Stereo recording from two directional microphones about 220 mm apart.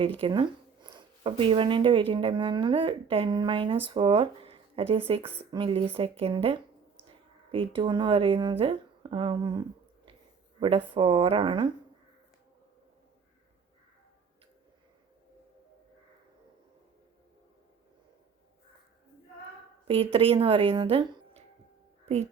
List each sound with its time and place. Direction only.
0.0 s speech: 25° right (ahead or behind)
19.9 s speech: 25° right (ahead or behind)
22.0 s music: 30° right (ahead or behind)